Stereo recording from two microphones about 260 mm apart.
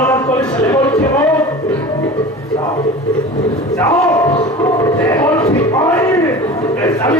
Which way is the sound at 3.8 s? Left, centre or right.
Centre.